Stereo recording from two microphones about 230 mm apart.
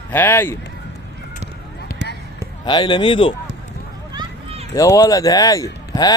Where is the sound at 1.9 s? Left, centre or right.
Left.